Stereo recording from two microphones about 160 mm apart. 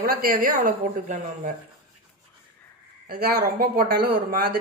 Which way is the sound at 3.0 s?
70° right (ahead or behind).